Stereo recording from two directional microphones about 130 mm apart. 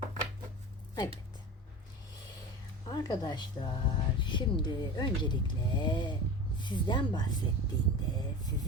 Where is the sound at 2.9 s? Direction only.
30° left (ahead or behind).